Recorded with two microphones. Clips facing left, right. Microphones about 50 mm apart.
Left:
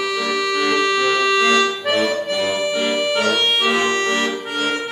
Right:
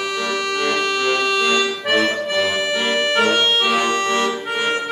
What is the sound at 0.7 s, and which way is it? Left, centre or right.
Accordion, right.